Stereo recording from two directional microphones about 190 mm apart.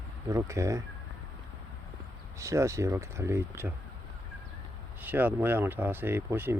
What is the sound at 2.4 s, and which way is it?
Speech, 15° right (ahead or behind).